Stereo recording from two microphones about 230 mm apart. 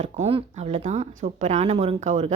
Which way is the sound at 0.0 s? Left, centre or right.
Right.